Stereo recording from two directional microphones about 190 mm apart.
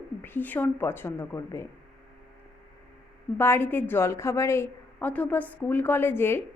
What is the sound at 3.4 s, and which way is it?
A woman's voice, 10° left (ahead or behind).